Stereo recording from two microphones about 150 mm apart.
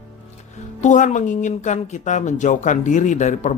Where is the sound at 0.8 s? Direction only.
55° left (ahead or behind).